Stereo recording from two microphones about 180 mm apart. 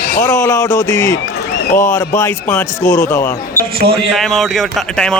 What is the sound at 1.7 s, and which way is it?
Speech, 45° left (ahead or behind).